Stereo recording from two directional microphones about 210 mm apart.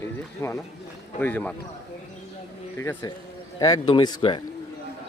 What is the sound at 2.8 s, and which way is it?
A man's voice, 15° left (ahead or behind).